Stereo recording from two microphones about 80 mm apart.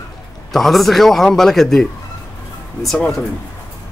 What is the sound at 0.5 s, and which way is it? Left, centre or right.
Speech, centre.